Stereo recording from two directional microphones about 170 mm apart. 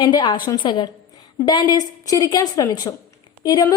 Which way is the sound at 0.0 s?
25° left (ahead or behind).